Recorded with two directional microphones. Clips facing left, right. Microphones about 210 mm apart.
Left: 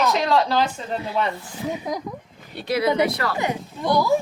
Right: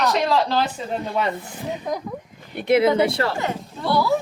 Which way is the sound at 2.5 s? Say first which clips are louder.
Right 5 dB; 20° right (ahead or behind).